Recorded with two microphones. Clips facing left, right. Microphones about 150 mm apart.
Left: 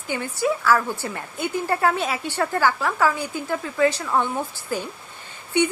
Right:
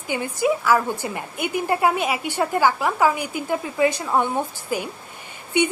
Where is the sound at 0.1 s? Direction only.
15° right (ahead or behind).